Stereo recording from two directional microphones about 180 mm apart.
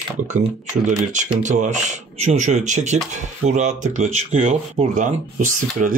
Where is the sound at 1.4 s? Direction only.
40° right (ahead or behind).